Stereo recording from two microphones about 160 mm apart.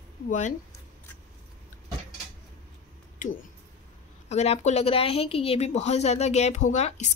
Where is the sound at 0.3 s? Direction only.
50° left (ahead or behind).